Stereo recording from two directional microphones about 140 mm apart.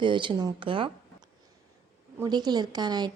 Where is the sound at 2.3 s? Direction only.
30° right (ahead or behind).